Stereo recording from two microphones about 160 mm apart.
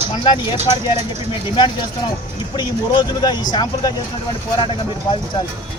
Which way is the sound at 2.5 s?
30° left (ahead or behind).